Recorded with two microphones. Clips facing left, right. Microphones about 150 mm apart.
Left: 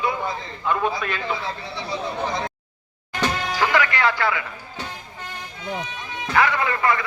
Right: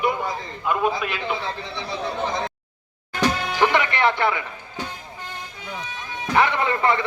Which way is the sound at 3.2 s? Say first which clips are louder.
Right 3 dB; 20° right (ahead or behind).